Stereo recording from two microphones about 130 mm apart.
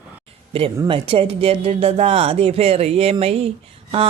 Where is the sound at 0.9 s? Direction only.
45° right (ahead or behind).